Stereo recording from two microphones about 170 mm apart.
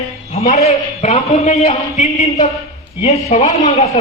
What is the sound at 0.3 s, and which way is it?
A man's voice, 40° left (ahead or behind).